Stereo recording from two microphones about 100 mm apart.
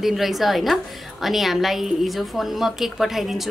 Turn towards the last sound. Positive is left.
turn(degrees=0)  # may be behind; listen again after turning